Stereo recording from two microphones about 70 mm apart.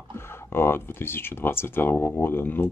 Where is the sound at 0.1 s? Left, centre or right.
Left.